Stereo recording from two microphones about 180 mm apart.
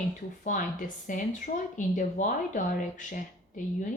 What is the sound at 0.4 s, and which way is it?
A woman's voice, 50° left (ahead or behind).